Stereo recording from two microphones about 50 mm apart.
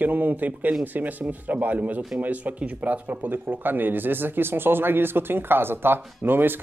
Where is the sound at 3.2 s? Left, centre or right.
Right.